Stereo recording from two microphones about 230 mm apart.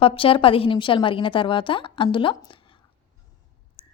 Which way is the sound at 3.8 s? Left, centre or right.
Left.